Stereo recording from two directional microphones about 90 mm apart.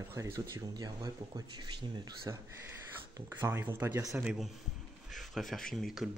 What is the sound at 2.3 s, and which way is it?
Speech, 40° right (ahead or behind).